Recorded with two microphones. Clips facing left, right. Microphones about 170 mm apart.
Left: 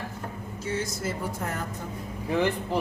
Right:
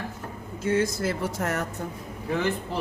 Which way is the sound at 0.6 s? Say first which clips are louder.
Right 7 dB; 55° right (ahead or behind).